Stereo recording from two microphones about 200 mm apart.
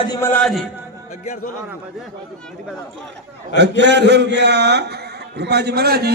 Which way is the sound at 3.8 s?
60° right (ahead or behind).